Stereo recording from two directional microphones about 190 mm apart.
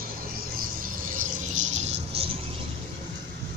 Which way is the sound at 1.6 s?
35° right (ahead or behind).